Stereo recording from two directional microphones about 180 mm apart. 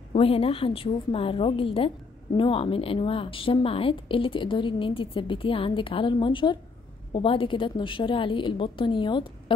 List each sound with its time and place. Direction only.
0.1 s a woman's voice: 30° left (ahead or behind)